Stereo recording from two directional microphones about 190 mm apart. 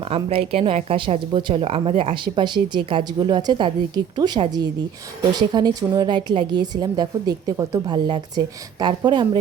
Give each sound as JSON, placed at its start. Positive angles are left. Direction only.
{"t": 0.0, "sound": "speech", "side_deg": -30}